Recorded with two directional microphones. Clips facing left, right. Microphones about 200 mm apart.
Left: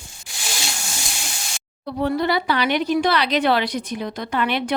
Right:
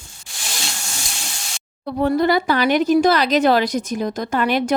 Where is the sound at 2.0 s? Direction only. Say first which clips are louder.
Right 4 dB; 45° right (ahead or behind).